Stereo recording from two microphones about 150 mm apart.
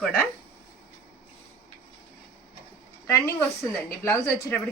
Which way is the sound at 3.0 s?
20° left (ahead or behind).